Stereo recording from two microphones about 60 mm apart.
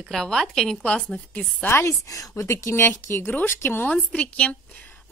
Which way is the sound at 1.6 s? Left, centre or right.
Left.